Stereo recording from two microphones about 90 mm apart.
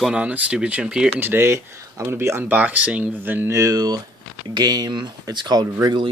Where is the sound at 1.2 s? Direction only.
25° right (ahead or behind).